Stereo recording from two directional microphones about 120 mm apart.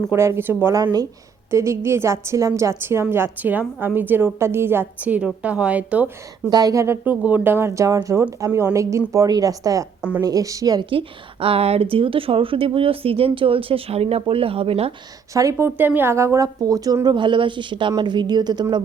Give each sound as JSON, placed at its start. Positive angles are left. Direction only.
{"t": 0.1, "sound": "a woman's voice", "side_deg": -20}
{"t": 6.5, "sound": "a woman's voice", "side_deg": -30}
{"t": 10.8, "sound": "speech", "side_deg": -50}
{"t": 15.3, "sound": "a woman's voice", "side_deg": -25}